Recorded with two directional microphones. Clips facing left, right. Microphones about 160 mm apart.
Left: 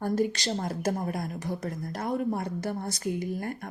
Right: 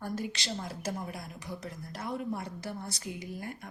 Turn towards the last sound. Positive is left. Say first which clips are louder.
# left 8 dB
turn(degrees=50)  # may be behind; listen again after turning